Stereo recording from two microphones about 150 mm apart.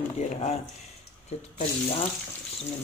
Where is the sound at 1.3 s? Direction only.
45° left (ahead or behind).